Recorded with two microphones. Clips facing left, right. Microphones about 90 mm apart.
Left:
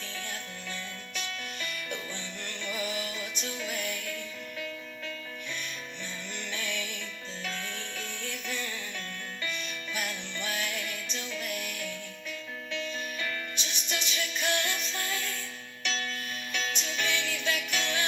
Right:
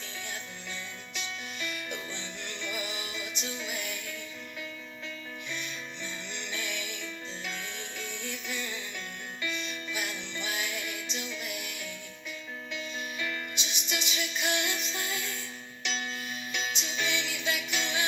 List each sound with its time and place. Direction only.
2.6 s music: 15° right (ahead or behind)
6.5 s music: 15° right (ahead or behind)
8.0 s music: 15° right (ahead or behind)
11.4 s music: 55° left (ahead or behind)
13.6 s music: 15° right (ahead or behind)